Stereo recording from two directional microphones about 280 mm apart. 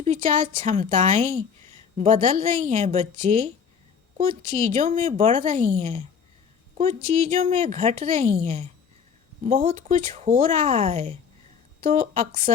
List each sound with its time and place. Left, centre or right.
0.0 s a woman's voice: right
7.1 s a woman's voice: right